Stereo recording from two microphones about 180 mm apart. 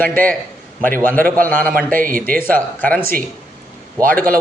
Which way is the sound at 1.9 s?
50° right (ahead or behind).